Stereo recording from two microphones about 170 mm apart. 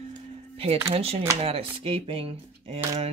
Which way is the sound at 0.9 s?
35° right (ahead or behind).